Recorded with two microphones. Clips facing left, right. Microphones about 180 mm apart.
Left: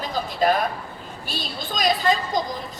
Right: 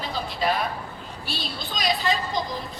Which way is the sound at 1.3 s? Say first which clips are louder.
Left 2 dB; 45° left (ahead or behind).